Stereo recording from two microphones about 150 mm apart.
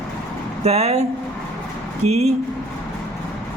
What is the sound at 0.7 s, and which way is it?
Speech, 45° right (ahead or behind).